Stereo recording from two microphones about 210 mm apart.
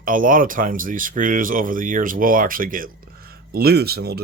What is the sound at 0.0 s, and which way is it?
Speech, 40° right (ahead or behind).